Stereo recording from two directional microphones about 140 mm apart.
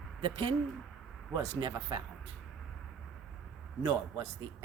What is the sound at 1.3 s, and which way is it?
Speech, 35° right (ahead or behind).